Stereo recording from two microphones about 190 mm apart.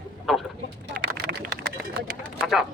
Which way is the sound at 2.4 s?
Centre (ahead or behind).